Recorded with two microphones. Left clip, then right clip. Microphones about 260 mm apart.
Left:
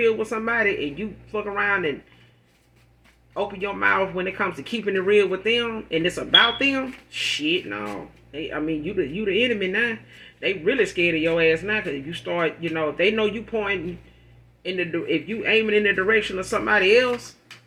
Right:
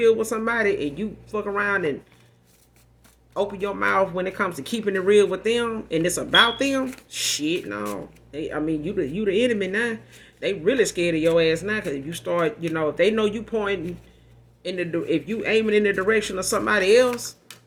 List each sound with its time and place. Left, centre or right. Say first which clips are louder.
0.0 s speech: right 2 dB; right
3.6 s speech: left 1 dB; right